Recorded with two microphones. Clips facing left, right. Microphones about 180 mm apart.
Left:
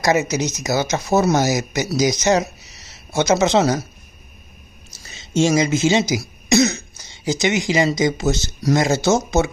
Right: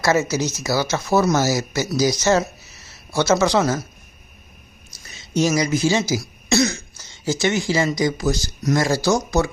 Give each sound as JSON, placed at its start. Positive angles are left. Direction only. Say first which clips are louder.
{"t": 0.0, "sound": "speech", "louder": "left 1 dB", "side_deg": 20}
{"t": 2.6, "sound": "a sound", "louder": "left 1 dB", "side_deg": 75}
{"t": 3.1, "sound": "speech", "louder": "left 1 dB", "side_deg": 20}
{"t": 5.0, "sound": "speech", "louder": "left 2 dB", "side_deg": 25}